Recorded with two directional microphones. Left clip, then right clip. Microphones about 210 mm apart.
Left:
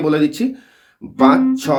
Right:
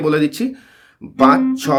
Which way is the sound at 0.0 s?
30° right (ahead or behind).